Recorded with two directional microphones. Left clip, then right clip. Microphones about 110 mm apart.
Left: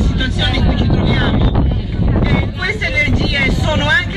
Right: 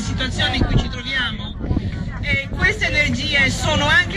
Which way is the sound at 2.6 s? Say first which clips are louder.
Left 1 dB; 30° right (ahead or behind).